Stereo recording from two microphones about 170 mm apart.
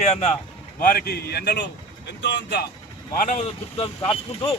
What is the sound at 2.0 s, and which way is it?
Speech, 90° left.